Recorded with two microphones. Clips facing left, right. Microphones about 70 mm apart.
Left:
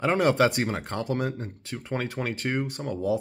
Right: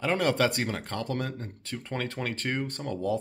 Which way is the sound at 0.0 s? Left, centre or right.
Left.